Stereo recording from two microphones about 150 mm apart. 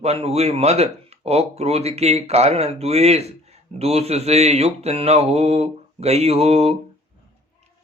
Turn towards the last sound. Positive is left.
turn(degrees=-40)  # may be behind; listen again after turning